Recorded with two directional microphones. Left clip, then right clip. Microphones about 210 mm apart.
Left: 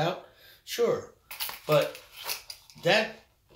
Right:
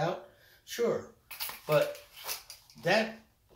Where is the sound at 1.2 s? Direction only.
5° left (ahead or behind).